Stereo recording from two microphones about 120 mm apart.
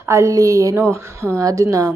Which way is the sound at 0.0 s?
25° right (ahead or behind).